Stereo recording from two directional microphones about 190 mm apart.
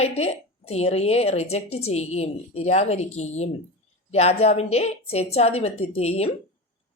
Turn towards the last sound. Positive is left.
turn(degrees=35)  # may be behind; listen again after turning